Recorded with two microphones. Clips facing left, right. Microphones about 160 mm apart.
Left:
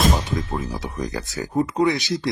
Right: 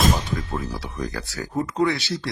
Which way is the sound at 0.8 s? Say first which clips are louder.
Left 2 dB; 20° left (ahead or behind).